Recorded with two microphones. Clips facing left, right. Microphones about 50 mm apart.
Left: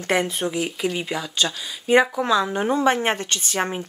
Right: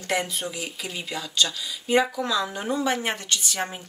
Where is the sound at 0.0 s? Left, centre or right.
Left.